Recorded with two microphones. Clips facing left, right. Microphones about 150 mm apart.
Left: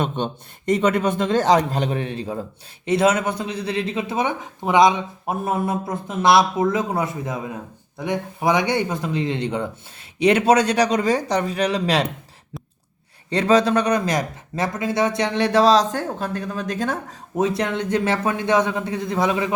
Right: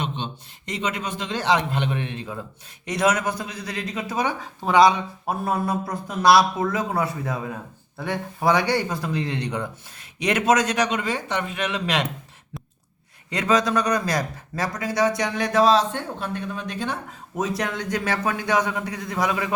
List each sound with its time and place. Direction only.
0.0 s a man's voice: 50° left (ahead or behind)
13.3 s a man's voice: 30° left (ahead or behind)
17.3 s speech: 30° left (ahead or behind)